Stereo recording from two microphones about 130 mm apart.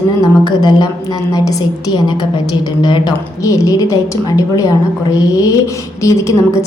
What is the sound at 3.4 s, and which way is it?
A woman's voice, 25° left (ahead or behind).